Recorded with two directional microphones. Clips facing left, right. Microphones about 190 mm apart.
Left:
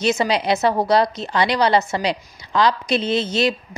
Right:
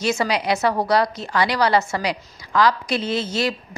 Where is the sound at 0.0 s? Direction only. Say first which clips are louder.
Left 2 dB; 20° left (ahead or behind).